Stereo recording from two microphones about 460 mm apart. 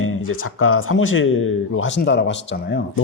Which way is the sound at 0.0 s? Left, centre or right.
Left.